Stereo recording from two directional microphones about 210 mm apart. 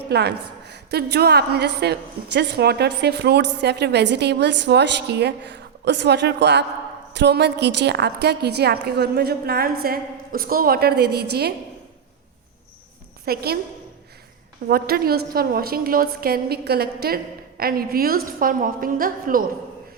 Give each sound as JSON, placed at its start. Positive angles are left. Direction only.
{"t": 0.1, "sound": "a woman's voice", "side_deg": -50}
{"t": 13.2, "sound": "a woman's voice", "side_deg": -45}
{"t": 14.7, "sound": "a woman's voice", "side_deg": -45}